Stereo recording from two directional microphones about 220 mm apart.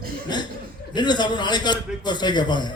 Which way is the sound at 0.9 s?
20° left (ahead or behind).